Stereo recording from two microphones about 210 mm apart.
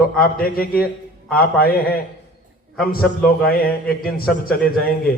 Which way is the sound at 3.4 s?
45° left (ahead or behind).